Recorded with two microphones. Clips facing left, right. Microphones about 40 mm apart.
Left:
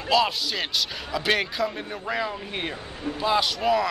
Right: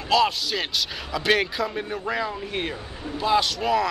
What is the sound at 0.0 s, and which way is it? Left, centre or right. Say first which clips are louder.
Speech: right 1 dB; centre.